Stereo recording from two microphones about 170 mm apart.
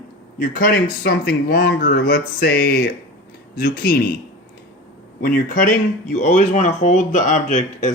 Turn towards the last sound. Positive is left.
turn(degrees=45)  # may be behind; listen again after turning